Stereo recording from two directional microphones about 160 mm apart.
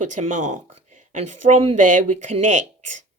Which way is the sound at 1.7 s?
50° right (ahead or behind).